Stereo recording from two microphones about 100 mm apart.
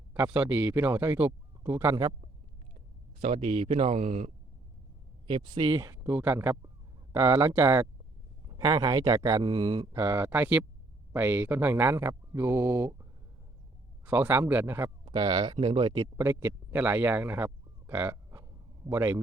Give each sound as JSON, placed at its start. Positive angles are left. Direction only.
{"t": 0.1, "sound": "speech", "side_deg": -15}
{"t": 3.2, "sound": "speech", "side_deg": -80}
{"t": 5.3, "sound": "speech", "side_deg": -50}
{"t": 5.7, "sound": "speech", "side_deg": -35}
{"t": 6.1, "sound": "speech", "side_deg": -20}
{"t": 8.5, "sound": "speech", "side_deg": -40}
{"t": 9.4, "sound": "speech", "side_deg": -50}
{"t": 9.9, "sound": "speech", "side_deg": -25}
{"t": 15.0, "sound": "speech", "side_deg": -45}
{"t": 15.5, "sound": "speech", "side_deg": -65}
{"t": 16.0, "sound": "speech", "side_deg": -30}